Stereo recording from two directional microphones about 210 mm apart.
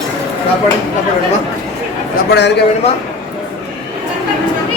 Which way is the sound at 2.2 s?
55° left (ahead or behind).